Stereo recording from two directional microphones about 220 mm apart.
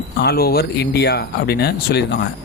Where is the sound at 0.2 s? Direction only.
45° left (ahead or behind).